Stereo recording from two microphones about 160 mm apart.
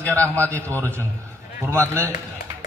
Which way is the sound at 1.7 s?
15° right (ahead or behind).